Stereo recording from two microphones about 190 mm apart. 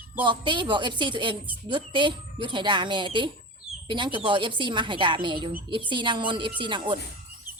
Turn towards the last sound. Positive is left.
turn(degrees=-25)  # may be behind; listen again after turning